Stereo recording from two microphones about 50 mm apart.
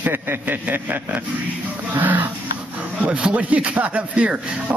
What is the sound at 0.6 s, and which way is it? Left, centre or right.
Speech, right.